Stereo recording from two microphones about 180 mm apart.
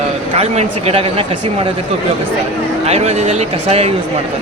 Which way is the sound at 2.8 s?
35° right (ahead or behind).